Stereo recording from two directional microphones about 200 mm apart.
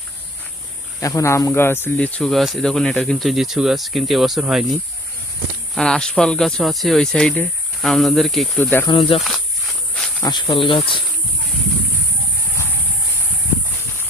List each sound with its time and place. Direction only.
1.0 s speech: 15° left (ahead or behind)
8.9 s speech: 25° left (ahead or behind)
9.9 s insect: 5° left (ahead or behind)
10.2 s speech: 20° left (ahead or behind)